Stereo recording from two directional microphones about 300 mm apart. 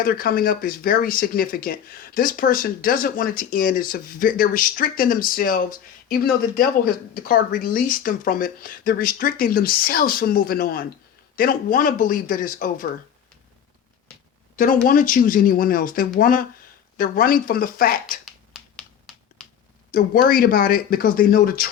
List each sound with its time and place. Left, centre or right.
0.0 s speech: left
14.5 s speech: left
18.5 s finger snapping: centre
19.9 s speech: left